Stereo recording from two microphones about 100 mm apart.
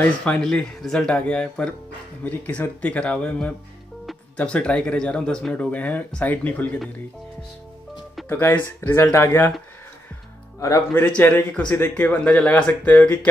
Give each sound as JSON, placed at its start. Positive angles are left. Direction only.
{"t": 0.2, "sound": "speech", "side_deg": 5}
{"t": 8.3, "sound": "speech", "side_deg": 20}
{"t": 11.1, "sound": "speech", "side_deg": 15}